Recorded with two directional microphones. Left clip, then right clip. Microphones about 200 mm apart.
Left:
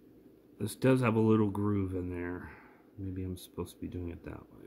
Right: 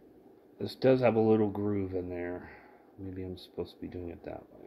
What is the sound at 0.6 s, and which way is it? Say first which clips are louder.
Speech: right 3 dB; 45° left (ahead or behind).